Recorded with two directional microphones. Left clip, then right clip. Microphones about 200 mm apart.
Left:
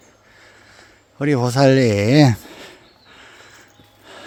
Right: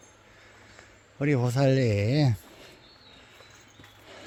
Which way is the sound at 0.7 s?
15° left (ahead or behind).